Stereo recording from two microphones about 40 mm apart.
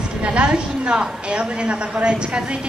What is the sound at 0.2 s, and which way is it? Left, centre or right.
A woman's voice, right.